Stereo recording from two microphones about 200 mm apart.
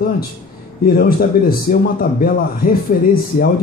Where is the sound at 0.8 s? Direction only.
45° left (ahead or behind).